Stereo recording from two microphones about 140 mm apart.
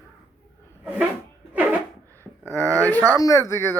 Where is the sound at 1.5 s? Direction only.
10° right (ahead or behind).